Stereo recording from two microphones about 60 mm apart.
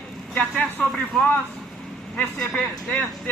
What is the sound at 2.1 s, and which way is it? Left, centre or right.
Speech, centre.